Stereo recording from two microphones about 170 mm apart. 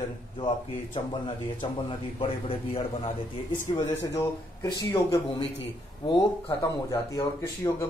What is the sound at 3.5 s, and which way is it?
A man's voice, 15° left (ahead or behind).